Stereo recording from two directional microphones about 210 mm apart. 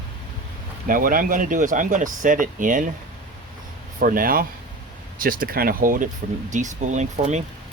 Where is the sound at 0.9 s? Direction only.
40° right (ahead or behind).